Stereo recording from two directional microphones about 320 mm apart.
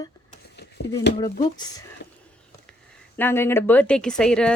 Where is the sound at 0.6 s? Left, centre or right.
Left.